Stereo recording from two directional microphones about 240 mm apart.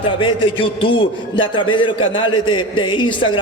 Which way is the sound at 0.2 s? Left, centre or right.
Left.